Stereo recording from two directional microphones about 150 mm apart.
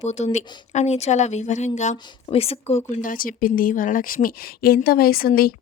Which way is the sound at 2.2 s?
40° left (ahead or behind).